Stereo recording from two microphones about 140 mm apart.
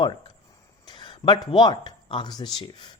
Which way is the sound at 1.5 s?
30° left (ahead or behind).